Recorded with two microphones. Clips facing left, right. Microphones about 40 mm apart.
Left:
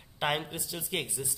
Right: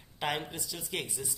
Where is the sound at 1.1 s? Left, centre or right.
Centre.